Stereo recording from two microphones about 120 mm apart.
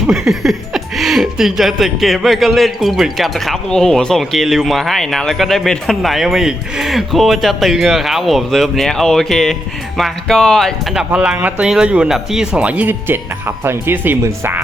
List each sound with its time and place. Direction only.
0.1 s speech: 5° right (ahead or behind)
11.1 s speech: 10° right (ahead or behind)